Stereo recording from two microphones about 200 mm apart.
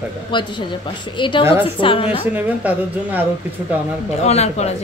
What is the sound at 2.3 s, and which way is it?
Speech, 5° right (ahead or behind).